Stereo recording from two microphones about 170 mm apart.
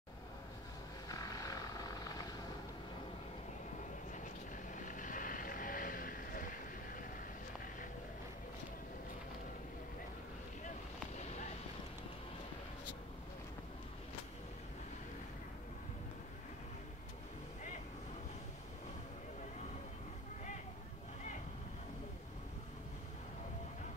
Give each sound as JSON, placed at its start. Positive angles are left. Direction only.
{"t": 1.0, "sound": "vehicle", "side_deg": 20}
{"t": 4.8, "sound": "vehicle", "side_deg": 50}
{"t": 11.1, "sound": "a sound", "side_deg": 40}